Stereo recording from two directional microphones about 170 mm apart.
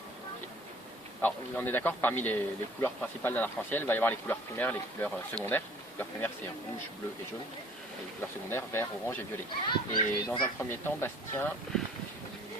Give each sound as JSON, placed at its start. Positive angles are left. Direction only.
{"t": 1.2, "sound": "speech", "side_deg": 10}
{"t": 8.4, "sound": "speech", "side_deg": 15}
{"t": 9.6, "sound": "a child's voice", "side_deg": 25}
{"t": 10.6, "sound": "speech", "side_deg": 10}